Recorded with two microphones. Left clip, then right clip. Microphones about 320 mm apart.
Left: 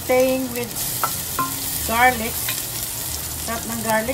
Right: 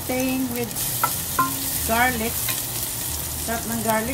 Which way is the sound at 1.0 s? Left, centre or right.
Centre.